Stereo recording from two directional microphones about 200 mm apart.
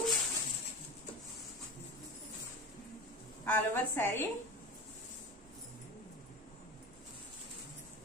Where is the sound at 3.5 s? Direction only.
10° left (ahead or behind).